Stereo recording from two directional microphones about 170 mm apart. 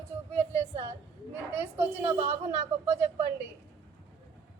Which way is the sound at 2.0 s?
35° right (ahead or behind).